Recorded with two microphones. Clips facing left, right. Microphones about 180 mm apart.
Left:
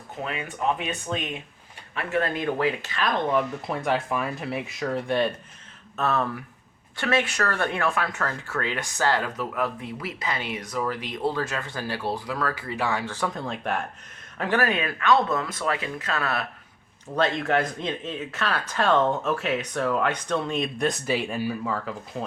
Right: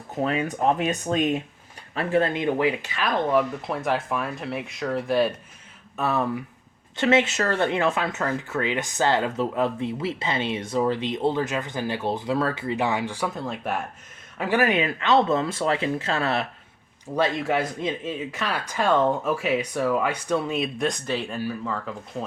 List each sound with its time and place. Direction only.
0.2 s speech: 40° right (ahead or behind)
2.0 s speech: 30° right (ahead or behind); by 5.3 s 5° right (ahead or behind)
6.0 s speech: 15° right (ahead or behind)
17.2 s speech: 10° right (ahead or behind)